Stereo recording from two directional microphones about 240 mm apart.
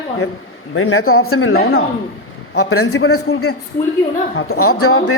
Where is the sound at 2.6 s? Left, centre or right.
Left.